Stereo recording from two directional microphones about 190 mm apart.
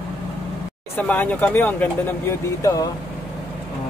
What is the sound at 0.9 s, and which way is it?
Speech, 10° left (ahead or behind).